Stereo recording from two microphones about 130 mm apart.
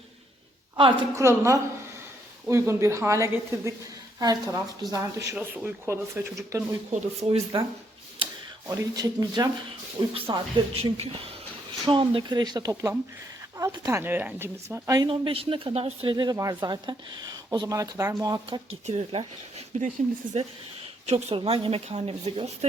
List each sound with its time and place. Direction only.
0.8 s speech: 40° right (ahead or behind)
1.1 s a woman's voice: 20° right (ahead or behind)
5.4 s speech: 15° right (ahead or behind)
6.9 s speech: 55° right (ahead or behind)
8.8 s a woman's voice: 30° right (ahead or behind)
10.2 s a woman's voice: 45° right (ahead or behind)
10.9 s a woman's voice: 50° right (ahead or behind)
11.9 s a woman's voice: 40° right (ahead or behind); by 14.0 s 25° right (ahead or behind)
14.0 s speech: 15° right (ahead or behind)
15.1 s a woman's voice: 45° right (ahead or behind)
16.1 s speech: 30° right (ahead or behind)
18.9 s a woman's voice: 60° right (ahead or behind)